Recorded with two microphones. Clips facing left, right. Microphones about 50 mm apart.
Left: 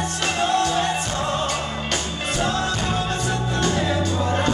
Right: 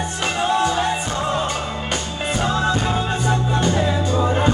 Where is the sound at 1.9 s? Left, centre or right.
Centre.